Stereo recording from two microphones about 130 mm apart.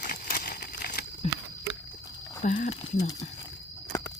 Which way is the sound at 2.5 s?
75° left (ahead or behind).